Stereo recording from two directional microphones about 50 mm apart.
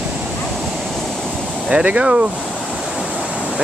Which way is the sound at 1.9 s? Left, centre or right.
Right.